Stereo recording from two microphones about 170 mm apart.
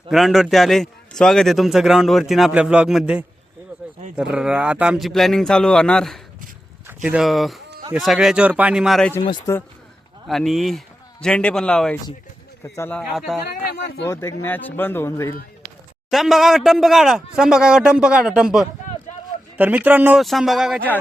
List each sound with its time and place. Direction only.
0.1 s a man's voice: centre (ahead or behind)
6.8 s a man's voice: 10° right (ahead or behind)
9.5 s speech: 15° left (ahead or behind)
10.2 s a man's voice: centre (ahead or behind)
13.1 s a man's voice: centre (ahead or behind)
13.6 s speech: 70° left (ahead or behind)
14.0 s speech: 15° left (ahead or behind)
16.0 s a man's voice: centre (ahead or behind)
20.2 s a man's voice: centre (ahead or behind)